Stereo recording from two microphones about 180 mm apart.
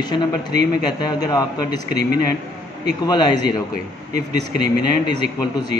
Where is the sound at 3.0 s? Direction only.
25° left (ahead or behind).